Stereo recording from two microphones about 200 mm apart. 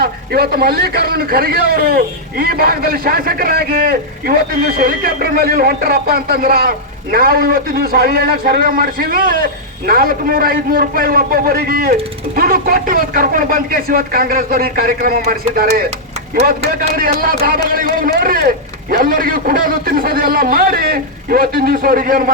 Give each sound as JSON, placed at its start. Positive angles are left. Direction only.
{"t": 0.0, "sound": "a man's voice", "side_deg": -50}
{"t": 16.9, "sound": "a man's voice", "side_deg": -45}